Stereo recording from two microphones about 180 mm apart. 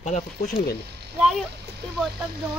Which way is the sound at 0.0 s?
40° left (ahead or behind).